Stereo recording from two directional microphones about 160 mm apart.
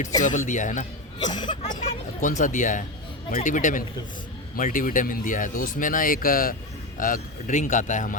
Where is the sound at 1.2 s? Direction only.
30° left (ahead or behind).